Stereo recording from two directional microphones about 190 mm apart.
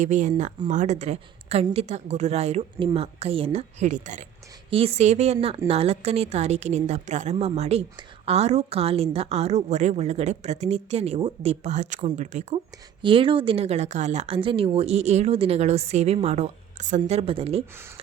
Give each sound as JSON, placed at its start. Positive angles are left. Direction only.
{"t": 0.0, "sound": "a woman's voice", "side_deg": -40}
{"t": 13.0, "sound": "a woman's voice", "side_deg": -25}